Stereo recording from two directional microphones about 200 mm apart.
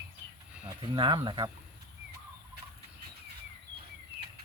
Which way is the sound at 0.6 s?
25° right (ahead or behind).